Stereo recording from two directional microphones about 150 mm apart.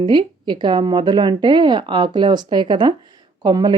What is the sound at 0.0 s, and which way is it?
Speech, 30° right (ahead or behind).